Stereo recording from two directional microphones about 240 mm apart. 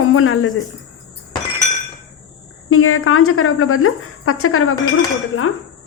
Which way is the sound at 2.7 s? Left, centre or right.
Left.